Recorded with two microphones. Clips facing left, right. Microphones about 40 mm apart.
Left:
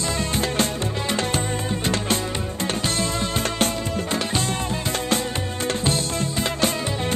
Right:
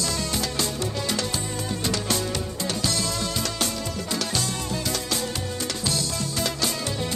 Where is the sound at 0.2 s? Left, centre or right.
Left.